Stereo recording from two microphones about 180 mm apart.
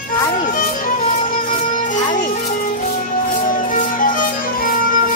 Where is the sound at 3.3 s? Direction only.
50° left (ahead or behind).